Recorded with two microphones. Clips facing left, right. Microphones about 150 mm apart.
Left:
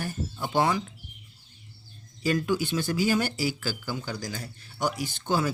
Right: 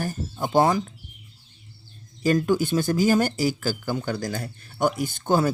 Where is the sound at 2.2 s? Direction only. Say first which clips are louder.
Right 5 dB; 45° right (ahead or behind).